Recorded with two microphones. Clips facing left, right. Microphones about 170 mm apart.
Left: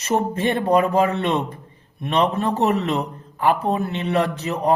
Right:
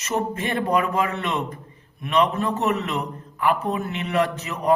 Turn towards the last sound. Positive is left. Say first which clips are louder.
# left 2 dB
turn(degrees=35)  # may be behind; listen again after turning